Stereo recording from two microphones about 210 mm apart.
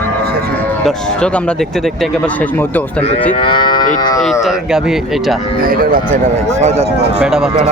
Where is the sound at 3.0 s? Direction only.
30° left (ahead or behind).